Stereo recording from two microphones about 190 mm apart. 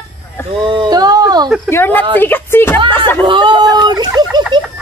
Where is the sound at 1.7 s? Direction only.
10° left (ahead or behind).